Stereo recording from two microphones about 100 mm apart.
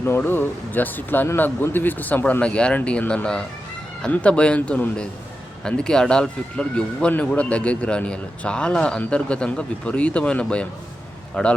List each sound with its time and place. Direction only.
0.0 s speech: 20° left (ahead or behind)